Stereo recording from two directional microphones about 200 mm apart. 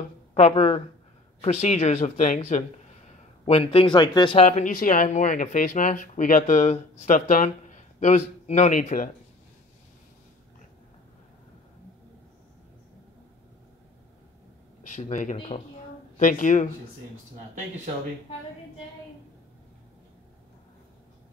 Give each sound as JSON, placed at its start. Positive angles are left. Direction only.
{"t": 0.3, "sound": "speech", "side_deg": 30}
{"t": 14.8, "sound": "speech", "side_deg": 35}
{"t": 16.2, "sound": "speech", "side_deg": 40}